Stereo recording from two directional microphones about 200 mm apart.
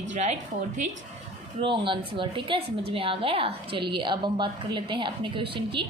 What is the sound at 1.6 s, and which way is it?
A woman's voice, 25° right (ahead or behind).